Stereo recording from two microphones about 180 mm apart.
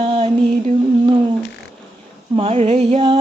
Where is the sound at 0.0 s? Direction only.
30° right (ahead or behind).